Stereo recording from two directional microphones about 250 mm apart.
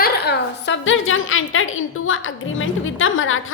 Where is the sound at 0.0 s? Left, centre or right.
Left.